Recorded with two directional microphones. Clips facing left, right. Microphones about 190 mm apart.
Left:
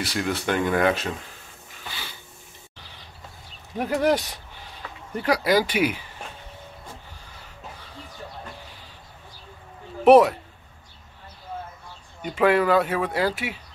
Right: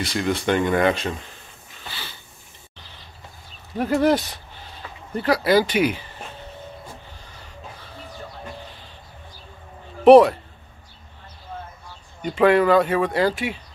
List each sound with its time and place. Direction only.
0.0 s speech: 5° left (ahead or behind)
3.7 s speech: 15° left (ahead or behind)
10.0 s speech: 10° left (ahead or behind)
12.2 s speech: 5° left (ahead or behind)